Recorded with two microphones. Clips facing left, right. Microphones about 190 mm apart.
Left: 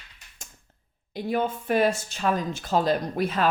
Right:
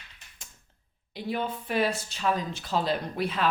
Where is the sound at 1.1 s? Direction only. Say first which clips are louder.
Left 5 dB; 45° left (ahead or behind).